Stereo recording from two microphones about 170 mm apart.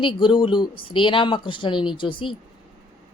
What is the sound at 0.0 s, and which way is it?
A man's voice, 30° left (ahead or behind).